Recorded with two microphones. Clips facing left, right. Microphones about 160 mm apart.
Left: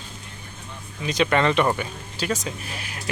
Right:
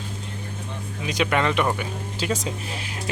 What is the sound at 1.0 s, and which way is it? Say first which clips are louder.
Speech: left 2 dB; 10° right (ahead or behind).